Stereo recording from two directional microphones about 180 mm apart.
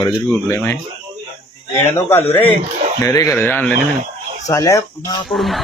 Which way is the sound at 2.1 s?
10° left (ahead or behind).